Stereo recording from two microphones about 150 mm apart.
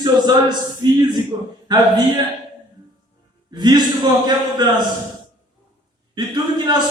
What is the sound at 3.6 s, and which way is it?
Speech, 30° right (ahead or behind).